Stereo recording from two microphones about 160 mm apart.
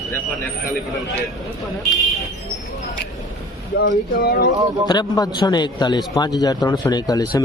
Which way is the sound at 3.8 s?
85° left.